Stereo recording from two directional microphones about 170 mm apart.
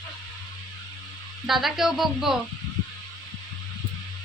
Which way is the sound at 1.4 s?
Centre (ahead or behind).